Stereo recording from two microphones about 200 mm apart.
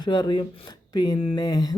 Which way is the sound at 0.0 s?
20° left (ahead or behind).